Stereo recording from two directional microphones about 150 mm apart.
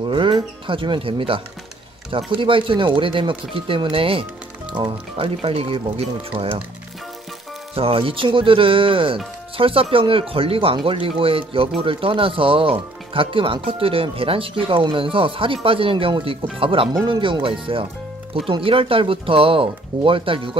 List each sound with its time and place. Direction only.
0.1 s speech: 30° right (ahead or behind)
7.7 s speech: 35° right (ahead or behind)